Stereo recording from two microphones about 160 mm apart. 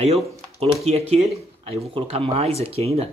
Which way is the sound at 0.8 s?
40° right (ahead or behind).